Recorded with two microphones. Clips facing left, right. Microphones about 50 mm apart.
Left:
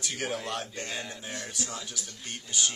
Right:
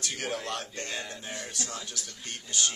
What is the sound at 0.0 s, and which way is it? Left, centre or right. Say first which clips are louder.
A man's voice: left 1 dB; centre.